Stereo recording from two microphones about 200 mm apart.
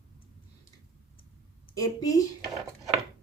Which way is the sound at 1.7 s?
15° left (ahead or behind).